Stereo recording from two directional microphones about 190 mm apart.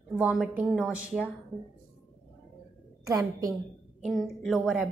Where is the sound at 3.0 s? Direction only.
20° right (ahead or behind).